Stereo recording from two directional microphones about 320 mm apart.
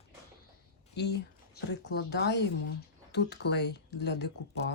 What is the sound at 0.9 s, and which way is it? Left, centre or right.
A woman's voice, left.